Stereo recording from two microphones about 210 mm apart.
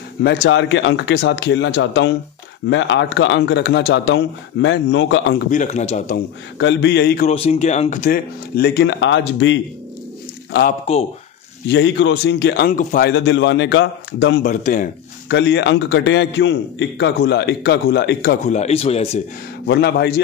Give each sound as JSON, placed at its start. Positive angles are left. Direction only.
{"t": 0.2, "sound": "a man's voice", "side_deg": 55}
{"t": 5.5, "sound": "speech", "side_deg": 35}
{"t": 6.6, "sound": "speech", "side_deg": 55}
{"t": 7.2, "sound": "speech", "side_deg": 30}
{"t": 10.9, "sound": "speech", "side_deg": 30}
{"t": 11.7, "sound": "a man's voice", "side_deg": 60}
{"t": 14.4, "sound": "speech", "side_deg": 35}
{"t": 15.2, "sound": "a man's voice", "side_deg": 55}
{"t": 18.5, "sound": "speech", "side_deg": 30}
{"t": 19.6, "sound": "speech", "side_deg": 50}